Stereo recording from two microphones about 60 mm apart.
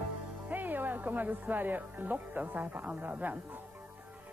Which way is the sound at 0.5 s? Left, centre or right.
Right.